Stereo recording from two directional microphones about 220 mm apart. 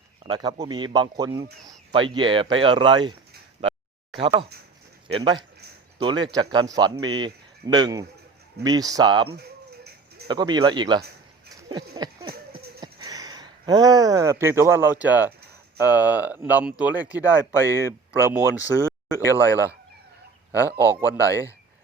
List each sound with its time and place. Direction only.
0.3 s speech: 20° right (ahead or behind)
4.2 s speech: 25° right (ahead or behind)
9.3 s a sound: 45° right (ahead or behind)
10.2 s speech: 20° right (ahead or behind)
11.7 s a sound: 20° right (ahead or behind)
12.8 s speech: 15° right (ahead or behind)
19.2 s speech: 15° left (ahead or behind)